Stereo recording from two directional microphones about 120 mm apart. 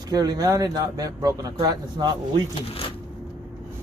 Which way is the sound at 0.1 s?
35° right (ahead or behind).